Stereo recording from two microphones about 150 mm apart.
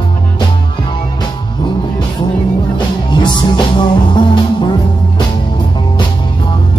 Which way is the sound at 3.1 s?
30° left (ahead or behind).